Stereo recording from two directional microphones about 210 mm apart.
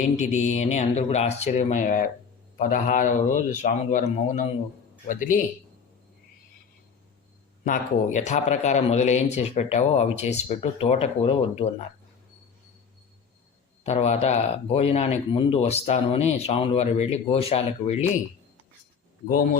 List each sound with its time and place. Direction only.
0.0 s speech: 35° left (ahead or behind)
7.6 s speech: 35° left (ahead or behind)
13.8 s speech: 30° left (ahead or behind)